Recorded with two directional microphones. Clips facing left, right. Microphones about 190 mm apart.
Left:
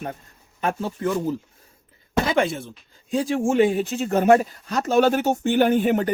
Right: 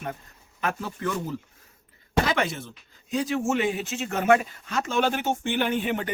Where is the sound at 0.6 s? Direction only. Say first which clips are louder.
Left 5 dB; 30° left (ahead or behind).